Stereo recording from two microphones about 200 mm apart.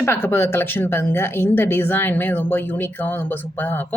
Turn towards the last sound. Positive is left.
turn(degrees=10)  # may be behind; listen again after turning